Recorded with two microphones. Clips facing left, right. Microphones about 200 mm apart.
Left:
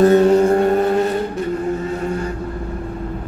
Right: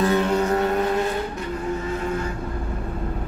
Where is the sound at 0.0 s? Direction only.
45° left (ahead or behind).